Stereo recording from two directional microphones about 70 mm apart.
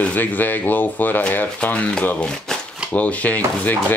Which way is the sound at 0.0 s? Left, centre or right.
Left.